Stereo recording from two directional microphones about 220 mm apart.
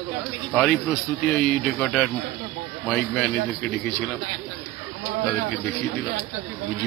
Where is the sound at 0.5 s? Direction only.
5° left (ahead or behind).